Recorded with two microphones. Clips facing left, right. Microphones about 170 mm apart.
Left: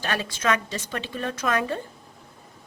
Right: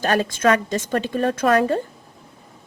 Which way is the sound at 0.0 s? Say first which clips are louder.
Right 8 dB; 45° right (ahead or behind).